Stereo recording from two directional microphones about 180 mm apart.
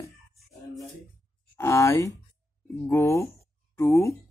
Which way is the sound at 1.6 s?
15° left (ahead or behind).